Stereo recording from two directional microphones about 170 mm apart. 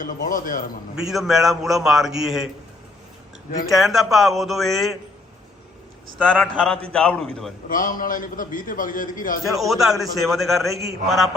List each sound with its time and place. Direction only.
0.0 s a man's voice: 50° left (ahead or behind)
1.0 s a man's voice: centre (ahead or behind)
3.7 s a man's voice: centre (ahead or behind)
6.1 s a man's voice: 5° left (ahead or behind)
7.7 s a man's voice: 55° left (ahead or behind)
9.6 s a man's voice: centre (ahead or behind)